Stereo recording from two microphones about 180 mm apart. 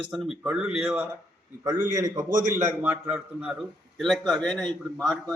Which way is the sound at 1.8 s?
20° right (ahead or behind).